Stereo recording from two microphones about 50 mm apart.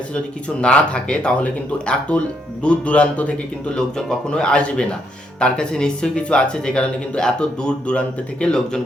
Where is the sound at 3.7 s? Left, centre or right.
Centre.